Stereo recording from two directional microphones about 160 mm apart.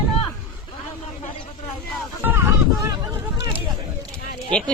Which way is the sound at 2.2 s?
15° right (ahead or behind).